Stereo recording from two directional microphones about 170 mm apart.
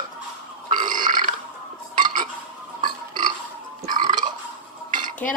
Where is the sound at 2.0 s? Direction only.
50° right (ahead or behind).